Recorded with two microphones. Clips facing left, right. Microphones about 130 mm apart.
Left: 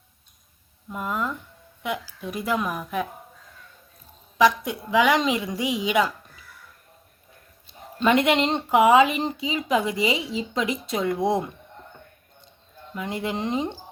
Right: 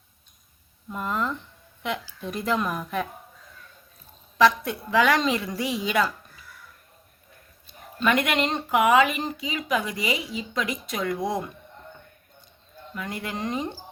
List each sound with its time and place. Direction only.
0.9 s a woman's voice: 5° left (ahead or behind)
4.4 s a woman's voice: 15° left (ahead or behind)
7.7 s speech: 25° left (ahead or behind)
12.9 s speech: 20° left (ahead or behind)